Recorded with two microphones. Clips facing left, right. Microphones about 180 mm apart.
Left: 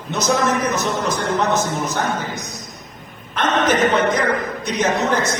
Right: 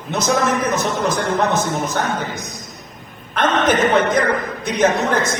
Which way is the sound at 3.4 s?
55° right (ahead or behind).